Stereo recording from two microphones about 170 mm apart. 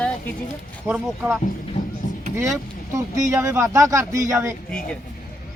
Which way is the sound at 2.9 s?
20° right (ahead or behind).